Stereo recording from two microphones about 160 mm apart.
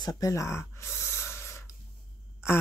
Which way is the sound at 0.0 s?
20° left (ahead or behind).